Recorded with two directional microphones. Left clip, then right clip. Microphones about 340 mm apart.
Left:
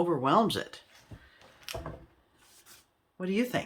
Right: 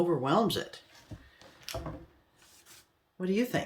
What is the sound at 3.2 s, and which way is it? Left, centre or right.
Speech, centre.